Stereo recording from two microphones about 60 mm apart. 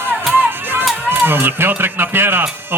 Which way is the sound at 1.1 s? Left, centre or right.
Right.